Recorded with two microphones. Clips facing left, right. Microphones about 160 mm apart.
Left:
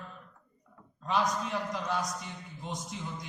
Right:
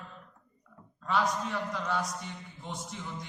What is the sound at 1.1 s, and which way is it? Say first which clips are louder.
A man's voice: even; 15° left (ahead or behind).